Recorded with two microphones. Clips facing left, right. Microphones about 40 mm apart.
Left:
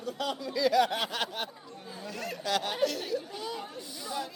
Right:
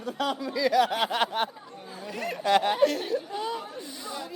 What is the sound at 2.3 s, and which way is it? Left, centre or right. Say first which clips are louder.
A man's voice: right 8 dB; right.